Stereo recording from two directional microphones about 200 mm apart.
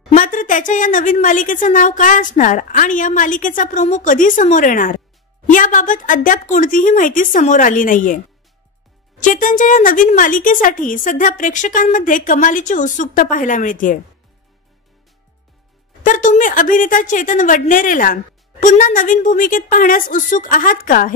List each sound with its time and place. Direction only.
0.1 s a woman's voice: 40° left (ahead or behind)
9.2 s a woman's voice: 40° left (ahead or behind)
16.0 s a woman's voice: 40° left (ahead or behind)